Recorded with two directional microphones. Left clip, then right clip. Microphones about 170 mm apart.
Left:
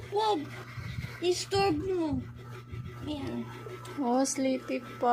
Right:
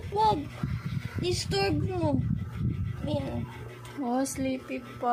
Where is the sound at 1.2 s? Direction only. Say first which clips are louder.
Left 1 dB; 35° right (ahead or behind).